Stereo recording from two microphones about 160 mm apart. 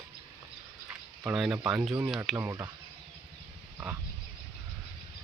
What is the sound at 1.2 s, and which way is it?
Speech, centre (ahead or behind).